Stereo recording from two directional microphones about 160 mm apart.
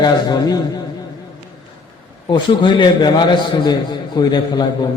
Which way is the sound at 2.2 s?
30° left (ahead or behind).